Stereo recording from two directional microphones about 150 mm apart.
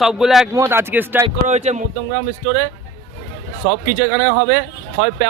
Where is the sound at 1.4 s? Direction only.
50° right (ahead or behind).